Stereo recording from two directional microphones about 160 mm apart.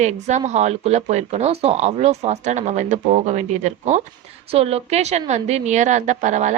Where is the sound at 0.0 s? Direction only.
45° right (ahead or behind).